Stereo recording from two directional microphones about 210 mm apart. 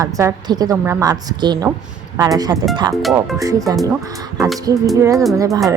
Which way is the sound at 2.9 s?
Centre (ahead or behind).